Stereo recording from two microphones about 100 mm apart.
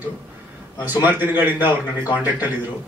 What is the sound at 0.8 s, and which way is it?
A man's voice, 20° right (ahead or behind).